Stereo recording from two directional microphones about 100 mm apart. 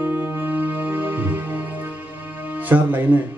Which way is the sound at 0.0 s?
20° right (ahead or behind).